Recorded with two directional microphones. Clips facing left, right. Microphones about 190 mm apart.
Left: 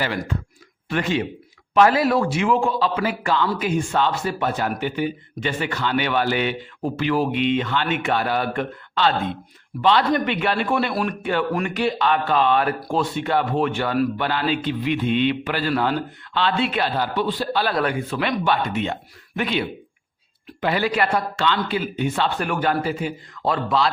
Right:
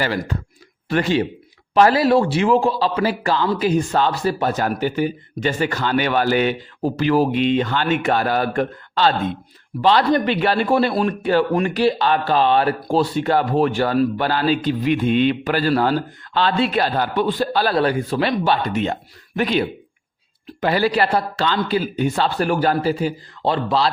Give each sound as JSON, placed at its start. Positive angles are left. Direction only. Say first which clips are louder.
{"t": 0.9, "sound": "a man's voice", "louder": "right 4 dB", "side_deg": -35}